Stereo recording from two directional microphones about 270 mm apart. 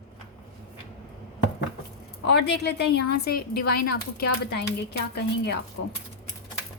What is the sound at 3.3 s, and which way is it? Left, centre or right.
Speech, left.